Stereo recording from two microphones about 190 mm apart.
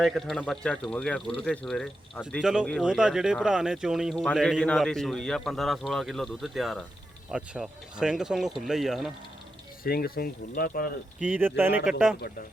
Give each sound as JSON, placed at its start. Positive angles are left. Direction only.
{"t": 0.0, "sound": "speech", "side_deg": 0}
{"t": 9.8, "sound": "speech", "side_deg": 50}
{"t": 11.2, "sound": "speech", "side_deg": -10}